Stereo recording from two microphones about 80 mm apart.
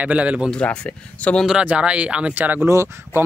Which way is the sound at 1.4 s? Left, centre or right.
Centre.